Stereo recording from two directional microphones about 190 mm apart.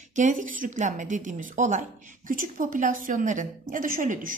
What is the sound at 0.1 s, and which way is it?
A woman's voice, 40° right (ahead or behind).